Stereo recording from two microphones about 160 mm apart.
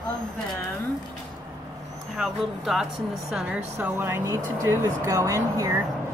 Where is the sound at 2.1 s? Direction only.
Centre (ahead or behind); by 5.7 s 20° right (ahead or behind).